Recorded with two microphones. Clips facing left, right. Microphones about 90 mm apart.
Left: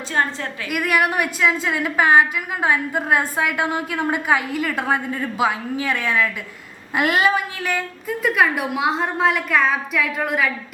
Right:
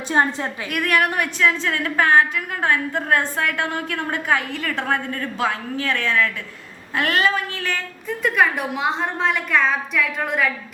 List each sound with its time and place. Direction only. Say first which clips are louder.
0.2 s a woman's voice: right 2 dB; 25° right (ahead or behind)
0.7 s a woman's voice: left 1 dB; 5° left (ahead or behind)